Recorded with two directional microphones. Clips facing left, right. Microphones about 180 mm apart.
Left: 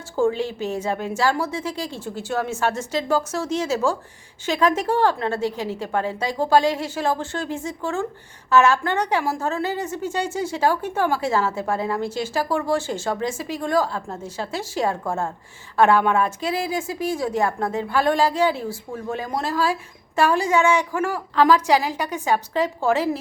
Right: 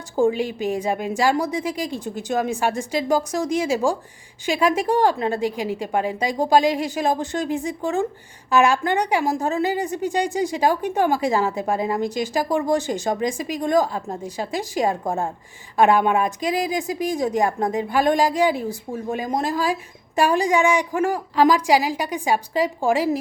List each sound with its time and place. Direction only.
0.2 s a woman's voice: 15° right (ahead or behind)